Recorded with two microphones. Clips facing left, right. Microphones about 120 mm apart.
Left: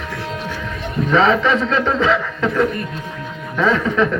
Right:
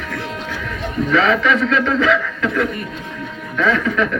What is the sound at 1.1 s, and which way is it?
A man's voice, 30° left (ahead or behind).